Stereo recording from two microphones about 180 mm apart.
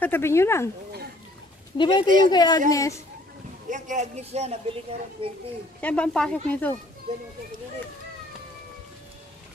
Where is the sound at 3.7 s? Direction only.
40° right (ahead or behind).